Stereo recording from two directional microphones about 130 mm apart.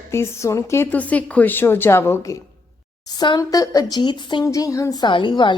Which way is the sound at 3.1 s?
30° left (ahead or behind).